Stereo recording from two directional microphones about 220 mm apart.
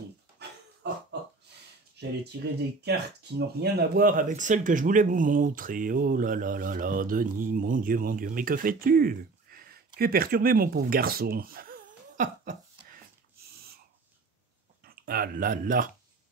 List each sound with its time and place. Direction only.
0.8 s a sound: 50° right (ahead or behind)
2.8 s speech: 45° right (ahead or behind)
14.8 s speech: 45° right (ahead or behind)